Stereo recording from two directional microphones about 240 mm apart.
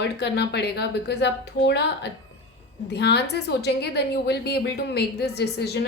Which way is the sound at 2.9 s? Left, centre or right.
Left.